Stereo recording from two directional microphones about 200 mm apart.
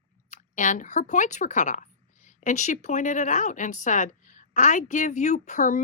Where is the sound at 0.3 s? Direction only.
40° left (ahead or behind).